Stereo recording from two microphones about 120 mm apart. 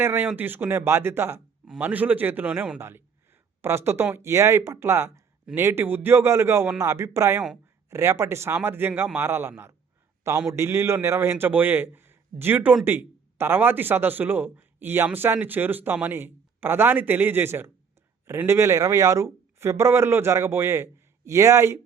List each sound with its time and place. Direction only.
0.0 s a man's voice: 15° right (ahead or behind)